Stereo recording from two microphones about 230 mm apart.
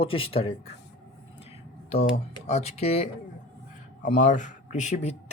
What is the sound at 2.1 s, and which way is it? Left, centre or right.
Speech, left.